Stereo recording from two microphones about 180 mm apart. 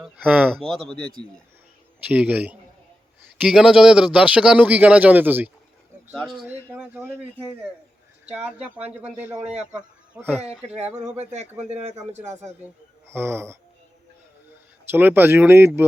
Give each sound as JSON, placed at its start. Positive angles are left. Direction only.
{"t": 0.0, "sound": "speech", "side_deg": 0}
{"t": 2.0, "sound": "speech", "side_deg": -10}
{"t": 8.3, "sound": "speech", "side_deg": -5}
{"t": 9.4, "sound": "speech", "side_deg": -35}
{"t": 9.7, "sound": "speech", "side_deg": -10}
{"t": 11.0, "sound": "speech", "side_deg": -40}
{"t": 12.4, "sound": "speech", "side_deg": -15}
{"t": 14.8, "sound": "speech", "side_deg": -10}